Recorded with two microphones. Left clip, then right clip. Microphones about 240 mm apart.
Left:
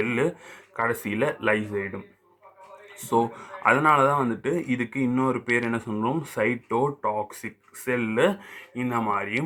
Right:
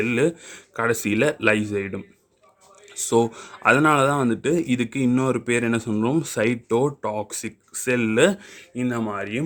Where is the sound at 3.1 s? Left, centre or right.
Right.